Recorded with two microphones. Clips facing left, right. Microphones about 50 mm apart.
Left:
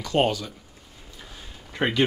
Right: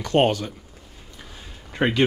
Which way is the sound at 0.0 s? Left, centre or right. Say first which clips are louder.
Right 3 dB; right.